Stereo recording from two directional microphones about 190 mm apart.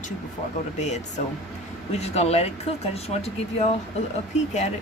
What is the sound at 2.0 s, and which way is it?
Speech, 35° left (ahead or behind).